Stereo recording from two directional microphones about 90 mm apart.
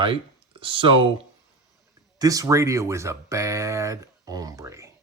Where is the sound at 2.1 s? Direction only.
40° right (ahead or behind).